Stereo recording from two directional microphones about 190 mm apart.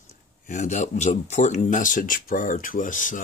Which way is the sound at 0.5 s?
40° left (ahead or behind).